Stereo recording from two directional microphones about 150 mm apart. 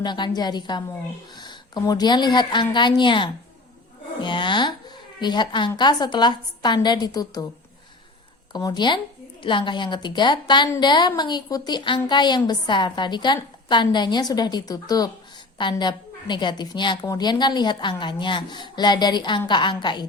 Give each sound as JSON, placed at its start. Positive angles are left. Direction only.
{"t": 0.0, "sound": "a woman's voice", "side_deg": 30}
{"t": 8.5, "sound": "a woman's voice", "side_deg": 30}